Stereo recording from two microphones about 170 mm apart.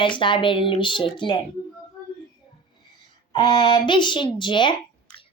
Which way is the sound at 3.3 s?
25° left (ahead or behind).